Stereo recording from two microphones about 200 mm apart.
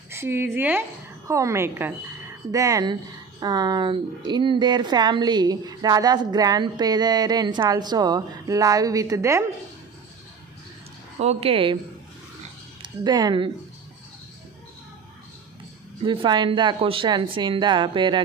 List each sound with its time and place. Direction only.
0.1 s a woman's voice: 10° right (ahead or behind)
11.2 s speech: 30° right (ahead or behind)
12.8 s speech: 20° right (ahead or behind)
16.0 s speech: 25° right (ahead or behind)